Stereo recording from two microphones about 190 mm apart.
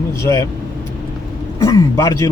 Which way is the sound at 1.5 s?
15° left (ahead or behind).